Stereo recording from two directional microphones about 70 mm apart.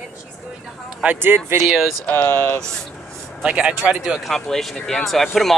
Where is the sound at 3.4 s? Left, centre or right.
Centre.